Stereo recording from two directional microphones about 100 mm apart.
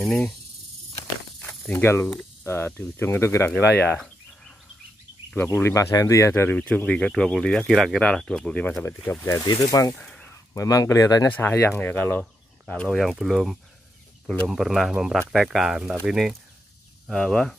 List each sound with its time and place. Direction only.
0.0 s speech: 5° left (ahead or behind)
1.7 s speech: 25° left (ahead or behind)
2.4 s mains hum: 25° left (ahead or behind)
2.8 s speech: 25° left (ahead or behind)
3.5 s speech: 15° left (ahead or behind)
5.3 s speech: 20° left (ahead or behind)
9.2 s speech: 30° left (ahead or behind)
9.9 s a sound: 5° left (ahead or behind)
10.5 s speech: 35° left (ahead or behind)
11.2 s speech: 20° left (ahead or behind)
12.2 s a sound: 10° left (ahead or behind)
12.8 s speech: centre (ahead or behind)